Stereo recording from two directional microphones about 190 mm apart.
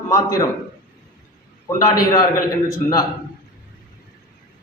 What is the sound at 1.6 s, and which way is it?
Speech, 20° left (ahead or behind).